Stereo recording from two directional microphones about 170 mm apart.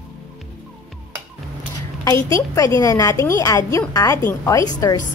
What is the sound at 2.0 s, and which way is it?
A woman's voice, 20° left (ahead or behind).